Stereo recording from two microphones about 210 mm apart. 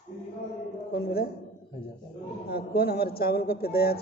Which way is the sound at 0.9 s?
45° left (ahead or behind).